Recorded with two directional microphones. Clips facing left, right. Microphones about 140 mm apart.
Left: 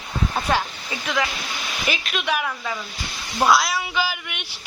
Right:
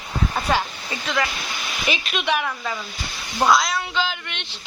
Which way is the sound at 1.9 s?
Centre (ahead or behind).